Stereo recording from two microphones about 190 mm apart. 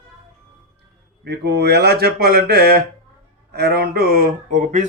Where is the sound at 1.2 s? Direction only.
60° right (ahead or behind).